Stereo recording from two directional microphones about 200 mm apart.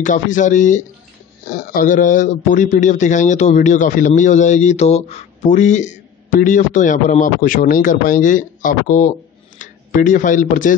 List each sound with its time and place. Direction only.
0.0 s a man's voice: 40° left (ahead or behind)